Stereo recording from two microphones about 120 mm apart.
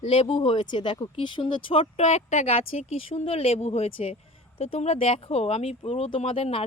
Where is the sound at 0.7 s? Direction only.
40° left (ahead or behind).